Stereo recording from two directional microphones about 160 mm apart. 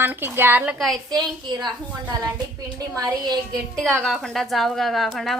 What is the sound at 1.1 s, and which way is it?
Speech, 25° right (ahead or behind).